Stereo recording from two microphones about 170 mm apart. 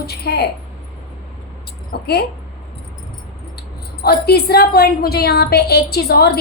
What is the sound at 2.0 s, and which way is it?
Speech, 70° left (ahead or behind).